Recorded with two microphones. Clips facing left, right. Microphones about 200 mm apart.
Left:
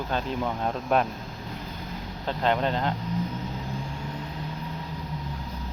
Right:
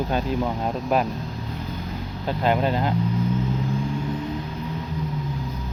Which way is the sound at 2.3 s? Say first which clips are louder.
Right 3 dB; 10° right (ahead or behind).